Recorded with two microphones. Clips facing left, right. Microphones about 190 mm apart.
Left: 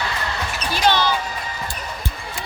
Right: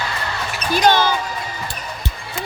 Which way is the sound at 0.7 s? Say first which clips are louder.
Right 4 dB; 45° right (ahead or behind).